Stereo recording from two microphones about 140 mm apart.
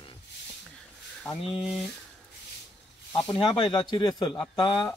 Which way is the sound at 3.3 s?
35° left (ahead or behind).